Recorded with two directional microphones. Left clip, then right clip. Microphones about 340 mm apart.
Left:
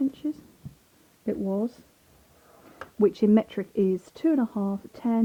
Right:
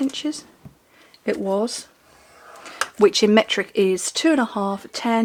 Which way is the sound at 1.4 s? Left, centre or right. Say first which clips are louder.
Right 8 dB; centre.